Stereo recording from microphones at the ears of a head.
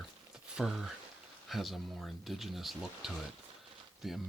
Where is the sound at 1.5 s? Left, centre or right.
Centre.